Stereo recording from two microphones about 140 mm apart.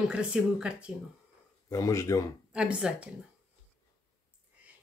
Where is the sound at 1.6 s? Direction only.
25° left (ahead or behind).